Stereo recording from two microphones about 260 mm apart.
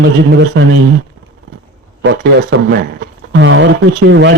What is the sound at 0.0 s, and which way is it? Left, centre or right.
Speech, right.